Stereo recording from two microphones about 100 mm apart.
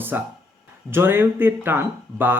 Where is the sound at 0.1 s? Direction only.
20° right (ahead or behind).